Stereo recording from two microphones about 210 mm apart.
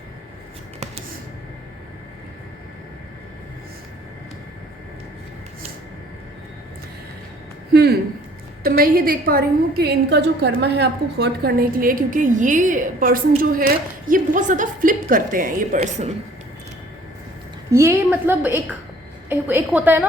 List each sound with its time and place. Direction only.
7.7 s a woman's voice: 50° right (ahead or behind); by 16.1 s 35° right (ahead or behind)
17.7 s a woman's voice: 15° right (ahead or behind)